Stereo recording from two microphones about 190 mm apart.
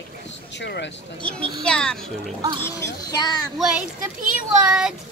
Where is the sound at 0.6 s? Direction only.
65° left (ahead or behind).